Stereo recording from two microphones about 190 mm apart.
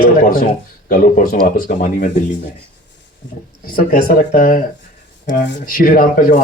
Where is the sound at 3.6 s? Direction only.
50° left (ahead or behind).